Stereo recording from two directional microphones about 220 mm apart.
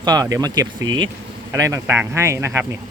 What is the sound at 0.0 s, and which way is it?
Speech, 15° right (ahead or behind).